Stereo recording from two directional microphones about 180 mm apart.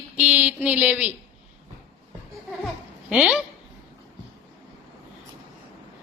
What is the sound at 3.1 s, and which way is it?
Speech, 5° right (ahead or behind).